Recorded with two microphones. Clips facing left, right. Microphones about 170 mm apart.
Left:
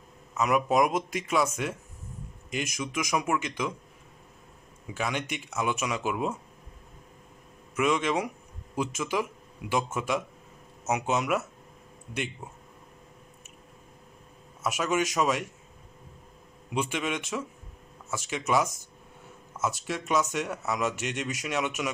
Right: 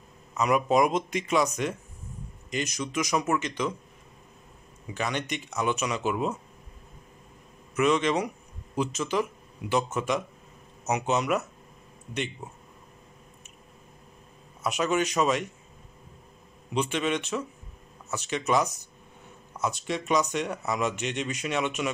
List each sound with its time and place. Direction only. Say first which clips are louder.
0.3 s speech: right 1 dB; 5° left (ahead or behind)
4.9 s speech: right 1 dB; 5° left (ahead or behind)
7.7 s speech: right 2 dB; 10° left (ahead or behind)
14.6 s speech: right 1 dB; 5° left (ahead or behind)
16.7 s speech: right 3 dB; 10° left (ahead or behind)